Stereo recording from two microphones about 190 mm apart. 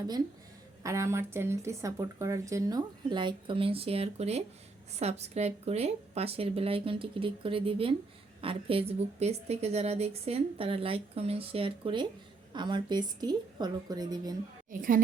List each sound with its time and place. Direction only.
0.8 s a woman's voice: 15° right (ahead or behind)
14.7 s a woman's voice: 45° right (ahead or behind)